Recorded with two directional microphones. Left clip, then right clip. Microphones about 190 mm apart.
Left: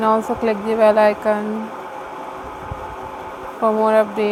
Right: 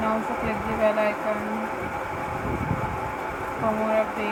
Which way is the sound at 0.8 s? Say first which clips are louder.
Left 10 dB; 80° left.